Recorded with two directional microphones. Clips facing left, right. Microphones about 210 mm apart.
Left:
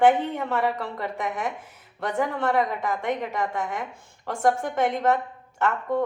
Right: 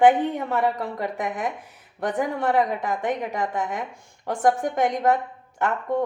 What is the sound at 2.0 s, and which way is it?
A woman's voice, 15° right (ahead or behind).